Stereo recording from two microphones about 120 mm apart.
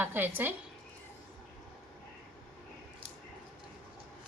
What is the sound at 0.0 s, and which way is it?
Speech, 15° right (ahead or behind).